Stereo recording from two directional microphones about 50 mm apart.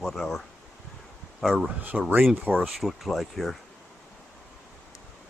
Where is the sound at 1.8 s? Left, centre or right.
Right.